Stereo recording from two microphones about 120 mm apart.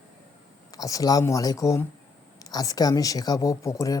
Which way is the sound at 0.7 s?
30° left (ahead or behind).